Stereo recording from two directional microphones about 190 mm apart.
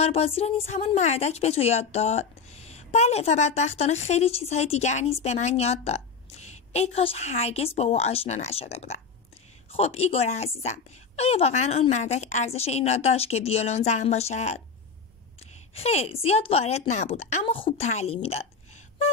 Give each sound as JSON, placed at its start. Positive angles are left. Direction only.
{"t": 0.0, "sound": "a woman's voice", "side_deg": 30}
{"t": 15.7, "sound": "a woman's voice", "side_deg": 35}